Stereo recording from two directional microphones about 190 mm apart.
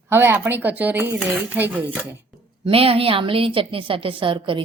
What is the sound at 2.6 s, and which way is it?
A woman's voice, 30° right (ahead or behind).